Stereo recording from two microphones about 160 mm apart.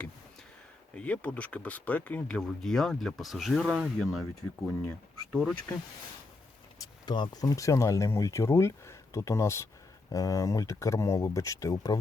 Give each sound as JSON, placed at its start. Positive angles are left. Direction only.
{"t": 0.9, "sound": "speech", "side_deg": 10}
{"t": 6.7, "sound": "speech", "side_deg": 25}